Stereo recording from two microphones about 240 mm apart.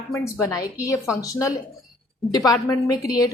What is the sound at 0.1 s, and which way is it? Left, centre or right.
A woman's voice, centre.